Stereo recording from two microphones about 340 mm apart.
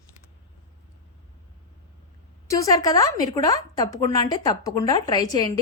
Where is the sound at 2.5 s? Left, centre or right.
Centre.